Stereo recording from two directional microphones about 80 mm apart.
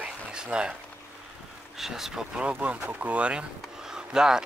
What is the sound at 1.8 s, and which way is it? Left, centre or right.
Speech, centre.